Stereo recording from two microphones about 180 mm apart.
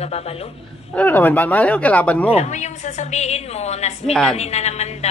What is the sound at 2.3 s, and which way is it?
A woman's voice, 40° left (ahead or behind).